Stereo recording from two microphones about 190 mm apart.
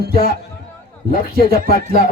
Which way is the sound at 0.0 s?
55° right (ahead or behind).